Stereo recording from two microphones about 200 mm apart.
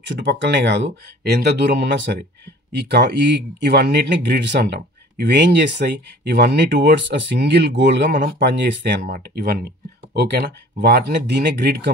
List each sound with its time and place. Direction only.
0.1 s speech: 60° right (ahead or behind)